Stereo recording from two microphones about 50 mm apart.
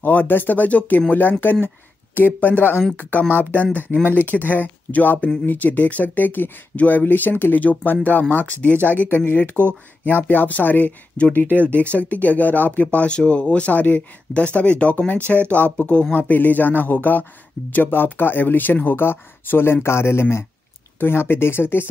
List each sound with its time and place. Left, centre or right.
0.0 s speech: left
12.0 s speech: left
12.8 s speech: left
21.0 s speech: left